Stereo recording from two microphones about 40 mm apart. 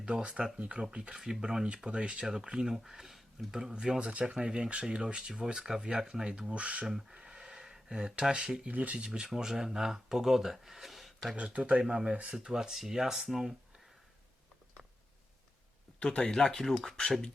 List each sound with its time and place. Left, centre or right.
0.0 s speech: right
2.2 s speech: centre
6.6 s speech: right
7.1 s gasp: right
7.5 s a sound: centre
8.3 s speech: centre
8.6 s speech: right
9.2 s speech: centre
11.8 s speech: centre
16.0 s speech: left
16.5 s speech: centre